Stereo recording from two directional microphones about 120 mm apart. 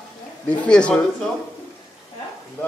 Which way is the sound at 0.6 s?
10° left (ahead or behind).